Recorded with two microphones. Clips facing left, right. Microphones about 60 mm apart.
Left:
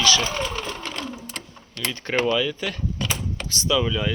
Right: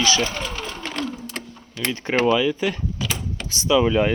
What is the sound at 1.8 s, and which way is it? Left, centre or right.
Speech, centre.